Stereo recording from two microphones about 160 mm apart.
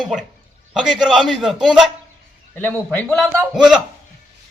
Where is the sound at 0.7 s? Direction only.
Centre (ahead or behind).